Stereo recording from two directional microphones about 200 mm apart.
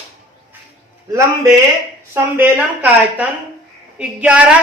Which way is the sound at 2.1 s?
10° right (ahead or behind).